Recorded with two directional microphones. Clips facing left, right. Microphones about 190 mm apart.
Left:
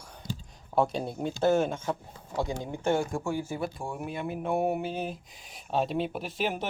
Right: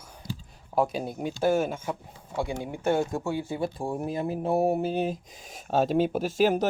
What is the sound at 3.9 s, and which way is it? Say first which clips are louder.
Speech: right 5 dB; 35° right (ahead or behind).